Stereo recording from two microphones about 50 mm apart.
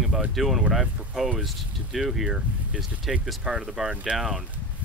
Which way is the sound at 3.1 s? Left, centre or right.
Centre.